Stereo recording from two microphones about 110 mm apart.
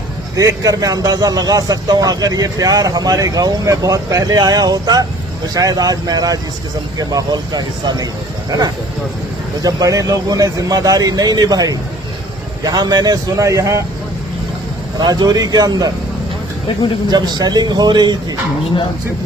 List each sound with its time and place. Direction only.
0.3 s speech: 35° right (ahead or behind)
14.9 s speech: 40° right (ahead or behind)
17.1 s speech: 40° right (ahead or behind)